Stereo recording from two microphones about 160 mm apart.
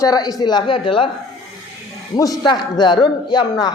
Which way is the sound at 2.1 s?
25° left (ahead or behind).